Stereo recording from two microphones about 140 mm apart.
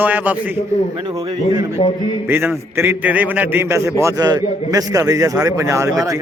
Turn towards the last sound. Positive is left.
turn(degrees=-20)  # may be behind; listen again after turning